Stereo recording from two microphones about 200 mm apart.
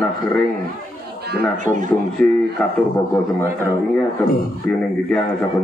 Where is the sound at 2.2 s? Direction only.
5° left (ahead or behind).